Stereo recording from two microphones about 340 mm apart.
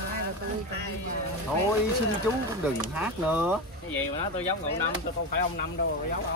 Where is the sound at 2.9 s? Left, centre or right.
Centre.